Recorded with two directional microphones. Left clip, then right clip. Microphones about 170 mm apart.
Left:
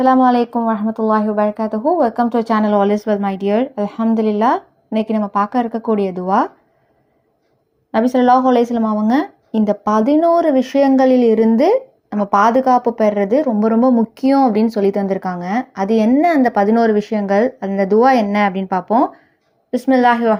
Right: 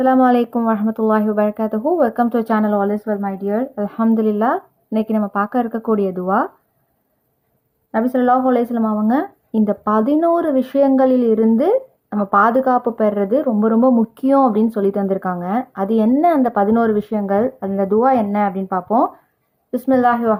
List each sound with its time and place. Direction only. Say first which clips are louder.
0.0 s speech: left 1 dB; 5° right (ahead or behind)
2.8 s speech: left 4 dB; 15° left (ahead or behind)
3.8 s a woman's voice: left 1 dB; 5° right (ahead or behind)
7.9 s a woman's voice: left 3 dB; 5° left (ahead or behind)